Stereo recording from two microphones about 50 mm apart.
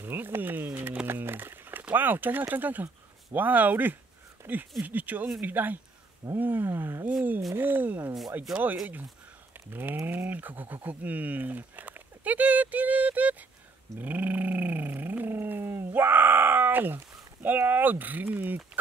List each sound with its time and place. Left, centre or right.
0.0 s a sound: right
3.3 s speech: right
6.3 s roaring cats: right
8.5 s speech: centre
9.7 s speech: right
13.9 s a sound: right